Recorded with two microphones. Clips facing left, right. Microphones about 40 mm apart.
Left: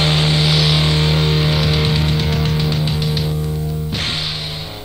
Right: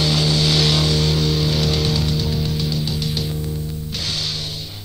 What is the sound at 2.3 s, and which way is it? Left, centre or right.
Music, left.